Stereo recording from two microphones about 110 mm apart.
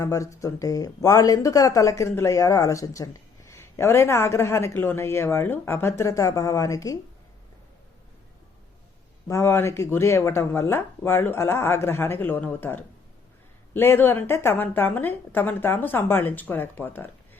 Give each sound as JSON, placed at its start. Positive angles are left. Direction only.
{"t": 0.0, "sound": "speech", "side_deg": 30}
{"t": 9.2, "sound": "speech", "side_deg": 25}